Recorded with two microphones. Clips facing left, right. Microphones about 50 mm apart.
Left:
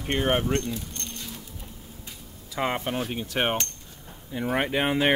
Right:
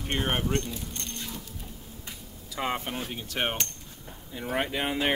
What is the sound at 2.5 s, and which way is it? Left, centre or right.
Coin, left.